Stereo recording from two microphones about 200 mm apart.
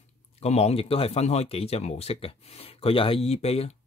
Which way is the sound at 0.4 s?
30° left (ahead or behind).